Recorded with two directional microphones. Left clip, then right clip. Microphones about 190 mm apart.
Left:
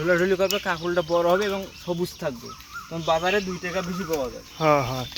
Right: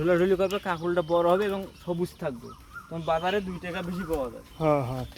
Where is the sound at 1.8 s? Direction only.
Centre (ahead or behind).